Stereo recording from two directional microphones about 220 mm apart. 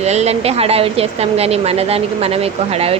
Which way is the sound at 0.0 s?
30° right (ahead or behind).